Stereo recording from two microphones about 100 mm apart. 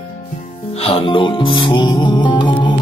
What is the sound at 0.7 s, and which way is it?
Music, 70° left (ahead or behind).